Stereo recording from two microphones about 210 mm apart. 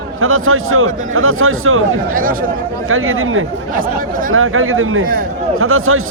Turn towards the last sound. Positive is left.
turn(degrees=-80)